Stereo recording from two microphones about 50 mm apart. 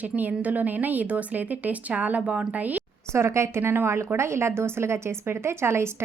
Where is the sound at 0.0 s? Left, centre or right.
Right.